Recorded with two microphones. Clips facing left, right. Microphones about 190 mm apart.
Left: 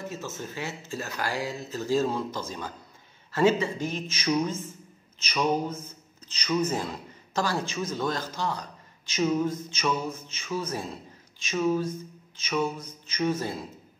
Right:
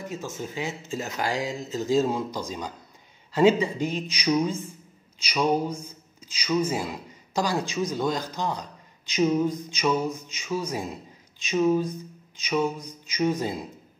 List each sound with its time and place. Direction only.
0.0 s a man's voice: 15° right (ahead or behind)